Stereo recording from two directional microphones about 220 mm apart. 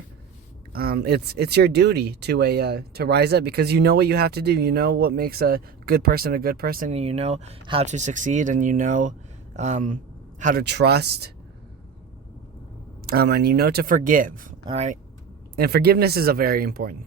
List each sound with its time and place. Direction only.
0.7 s speech: 45° right (ahead or behind)
10.4 s speech: 45° right (ahead or behind)
13.1 s speech: 45° right (ahead or behind)
14.6 s speech: 20° right (ahead or behind)
15.5 s speech: 45° right (ahead or behind)